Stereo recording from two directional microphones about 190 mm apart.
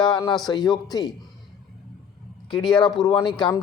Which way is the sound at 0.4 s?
20° left (ahead or behind).